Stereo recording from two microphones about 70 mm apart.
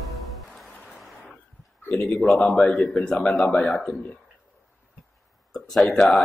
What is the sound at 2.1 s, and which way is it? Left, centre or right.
A man's voice, centre.